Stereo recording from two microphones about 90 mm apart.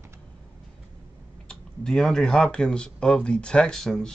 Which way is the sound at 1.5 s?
5° left (ahead or behind).